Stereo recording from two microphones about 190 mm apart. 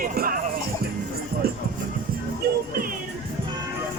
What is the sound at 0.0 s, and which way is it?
Music, 50° right (ahead or behind).